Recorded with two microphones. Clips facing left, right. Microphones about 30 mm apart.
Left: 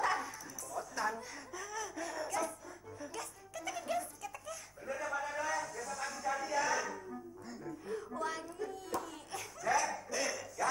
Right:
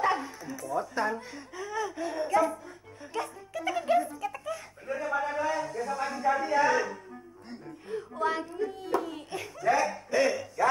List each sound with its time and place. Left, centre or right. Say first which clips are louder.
0.0 s speech: right 6 dB; right
7.4 s music: right 2 dB; right
8.2 s a sound: right 13 dB; right